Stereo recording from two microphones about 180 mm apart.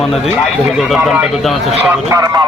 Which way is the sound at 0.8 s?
Centre (ahead or behind).